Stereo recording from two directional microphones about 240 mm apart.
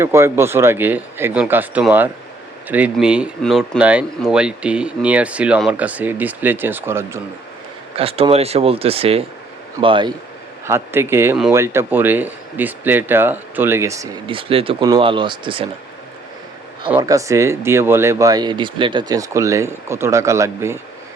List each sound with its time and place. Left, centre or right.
0.0 s speech: centre
7.9 s speech: right
10.7 s speech: centre
16.9 s speech: centre